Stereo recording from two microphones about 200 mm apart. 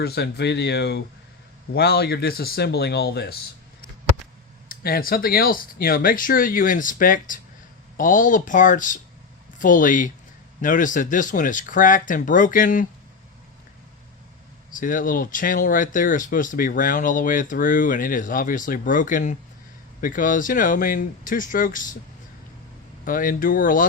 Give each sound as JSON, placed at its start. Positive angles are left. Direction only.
{"t": 0.0, "sound": "speech", "side_deg": 55}
{"t": 4.7, "sound": "speech", "side_deg": 45}
{"t": 14.7, "sound": "speech", "side_deg": 40}
{"t": 23.0, "sound": "speech", "side_deg": 45}